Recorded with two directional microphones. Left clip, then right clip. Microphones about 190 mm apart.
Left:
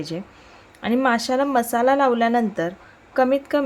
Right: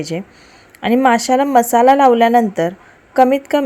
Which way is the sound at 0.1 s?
20° right (ahead or behind).